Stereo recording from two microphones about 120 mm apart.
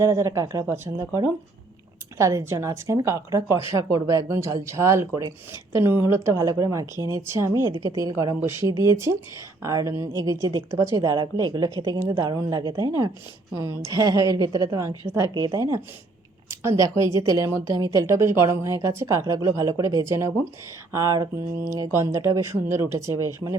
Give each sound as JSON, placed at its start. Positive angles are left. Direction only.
{"t": 0.0, "sound": "speech", "side_deg": -25}